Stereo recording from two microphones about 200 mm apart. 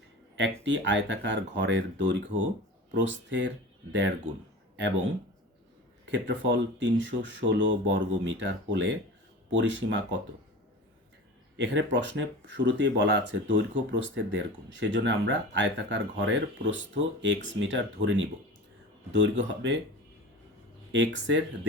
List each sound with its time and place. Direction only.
0.3 s speech: 65° right (ahead or behind)
6.1 s speech: 65° right (ahead or behind)
11.5 s speech: 65° right (ahead or behind)
20.9 s speech: 65° right (ahead or behind)